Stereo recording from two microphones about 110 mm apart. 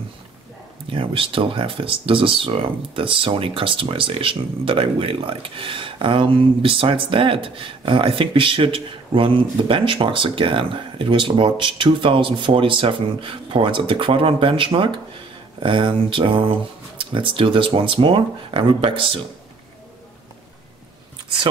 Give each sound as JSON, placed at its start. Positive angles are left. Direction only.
{"t": 0.8, "sound": "speech", "side_deg": -55}